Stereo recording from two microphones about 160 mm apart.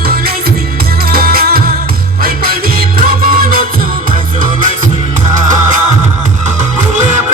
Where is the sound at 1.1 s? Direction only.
70° right (ahead or behind).